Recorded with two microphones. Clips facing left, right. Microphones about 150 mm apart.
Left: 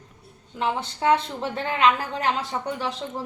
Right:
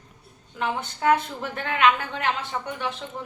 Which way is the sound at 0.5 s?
30° left (ahead or behind).